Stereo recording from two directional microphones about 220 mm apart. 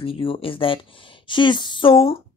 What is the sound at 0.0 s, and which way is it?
Speech, 25° left (ahead or behind).